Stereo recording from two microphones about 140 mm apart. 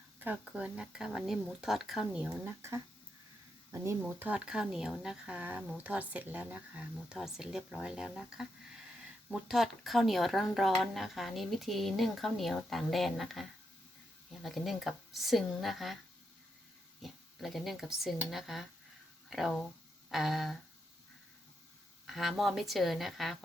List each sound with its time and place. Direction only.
0.2 s speech: 10° right (ahead or behind)
2.4 s speech: 20° right (ahead or behind); by 16.0 s centre (ahead or behind)
17.0 s speech: centre (ahead or behind)
22.0 s speech: centre (ahead or behind)